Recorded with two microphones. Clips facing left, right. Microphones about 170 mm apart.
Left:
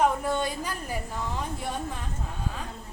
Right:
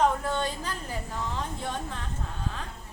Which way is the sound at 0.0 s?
10° left (ahead or behind).